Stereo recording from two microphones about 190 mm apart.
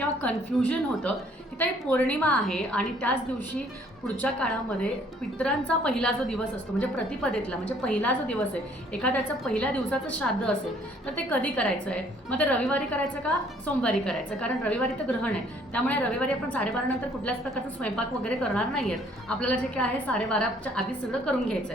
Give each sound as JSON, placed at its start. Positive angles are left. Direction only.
{"t": 0.2, "sound": "a woman's voice", "side_deg": 5}
{"t": 13.8, "sound": "a woman's voice", "side_deg": 5}